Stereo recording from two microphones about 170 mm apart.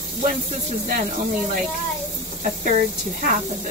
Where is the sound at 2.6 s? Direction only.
55° right (ahead or behind).